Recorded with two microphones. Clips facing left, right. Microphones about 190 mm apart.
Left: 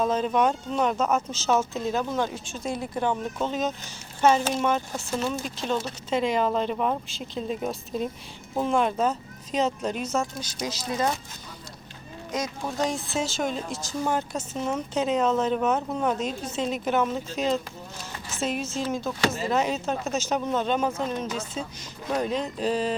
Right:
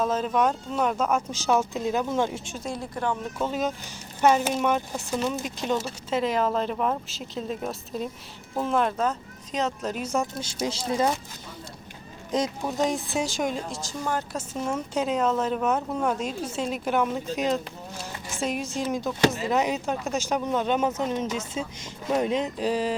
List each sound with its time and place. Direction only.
0.0 s a woman's voice: 5° right (ahead or behind); by 2.6 s 20° right (ahead or behind)
2.6 s speech: 20° left (ahead or behind)
3.4 s a woman's voice: 10° right (ahead or behind)
5.1 s speech: centre (ahead or behind)
10.4 s speech: 25° right (ahead or behind)
12.7 s a woman's voice: 20° right (ahead or behind)
13.8 s speech: 20° left (ahead or behind)
14.3 s a woman's voice: 10° right (ahead or behind)